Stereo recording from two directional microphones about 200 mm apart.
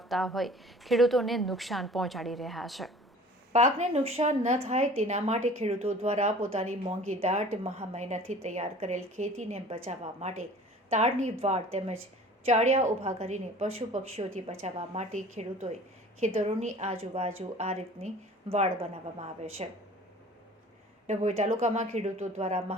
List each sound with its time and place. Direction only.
0.0 s a woman's voice: centre (ahead or behind)
3.5 s a woman's voice: 35° right (ahead or behind)
21.1 s a woman's voice: 35° right (ahead or behind)